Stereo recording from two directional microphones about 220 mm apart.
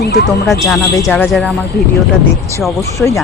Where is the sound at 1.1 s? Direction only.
5° left (ahead or behind).